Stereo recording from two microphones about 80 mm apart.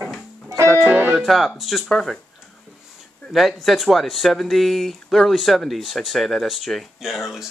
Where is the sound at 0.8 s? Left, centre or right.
Right.